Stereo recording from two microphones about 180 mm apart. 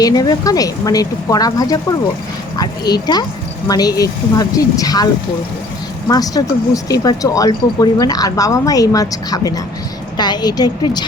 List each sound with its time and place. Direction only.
0.0 s speech: 20° left (ahead or behind)
6.1 s speech: 20° left (ahead or behind)